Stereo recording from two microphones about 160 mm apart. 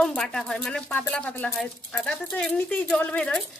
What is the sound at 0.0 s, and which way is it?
Speech, 5° left (ahead or behind).